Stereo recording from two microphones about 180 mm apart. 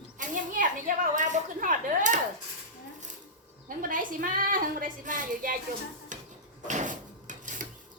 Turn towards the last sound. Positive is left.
turn(degrees=-45)  # may be behind; listen again after turning